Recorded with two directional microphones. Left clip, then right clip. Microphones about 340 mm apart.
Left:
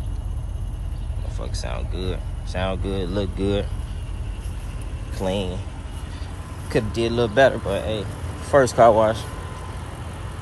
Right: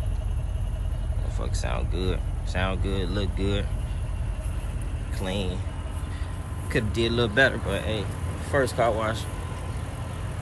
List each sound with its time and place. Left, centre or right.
1.4 s speech: centre
5.2 s speech: centre
6.7 s speech: centre